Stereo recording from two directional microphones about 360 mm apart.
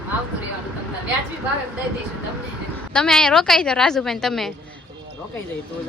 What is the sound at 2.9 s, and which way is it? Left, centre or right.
A woman's voice, centre.